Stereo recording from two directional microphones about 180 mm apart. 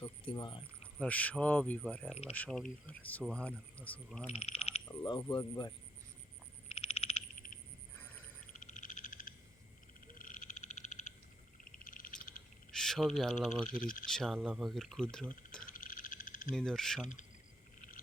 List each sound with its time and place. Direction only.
0.3 s speech: 25° left (ahead or behind)
0.9 s speech: 10° left (ahead or behind)
4.3 s a sound: 35° left (ahead or behind)
4.9 s speech: 25° left (ahead or behind)
6.7 s frog: 35° left (ahead or behind)
7.3 s frog: 50° left (ahead or behind)
12.7 s speech: centre (ahead or behind)
13.7 s speech: 50° left (ahead or behind)
14.1 s speech: 5° left (ahead or behind)
15.6 s frog: 50° left (ahead or behind)
16.5 s speech: 5° left (ahead or behind)